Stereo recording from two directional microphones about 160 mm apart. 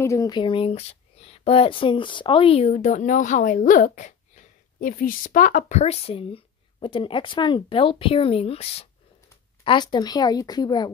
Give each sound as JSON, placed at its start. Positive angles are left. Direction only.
{"t": 0.0, "sound": "speech", "side_deg": 20}